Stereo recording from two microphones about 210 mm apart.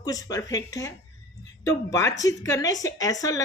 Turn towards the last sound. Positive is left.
turn(degrees=15)  # may be behind; listen again after turning